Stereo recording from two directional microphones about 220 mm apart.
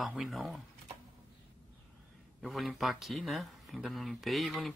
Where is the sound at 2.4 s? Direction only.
Centre (ahead or behind).